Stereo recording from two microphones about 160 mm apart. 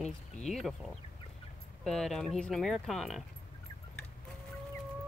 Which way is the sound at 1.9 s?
Centre (ahead or behind).